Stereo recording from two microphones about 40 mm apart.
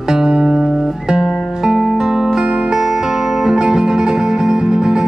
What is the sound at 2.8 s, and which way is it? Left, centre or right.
Music, centre.